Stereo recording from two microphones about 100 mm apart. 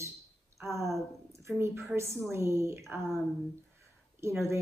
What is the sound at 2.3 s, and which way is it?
Speech, 25° right (ahead or behind).